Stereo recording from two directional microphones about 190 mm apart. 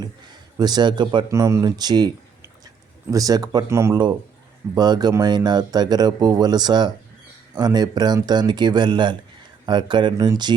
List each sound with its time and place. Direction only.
0.5 s speech: 20° right (ahead or behind)